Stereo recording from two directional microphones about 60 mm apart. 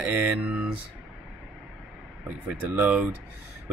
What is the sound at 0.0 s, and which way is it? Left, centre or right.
Speech, right.